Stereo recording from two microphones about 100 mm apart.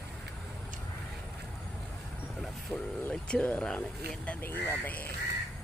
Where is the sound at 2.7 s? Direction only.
5° right (ahead or behind).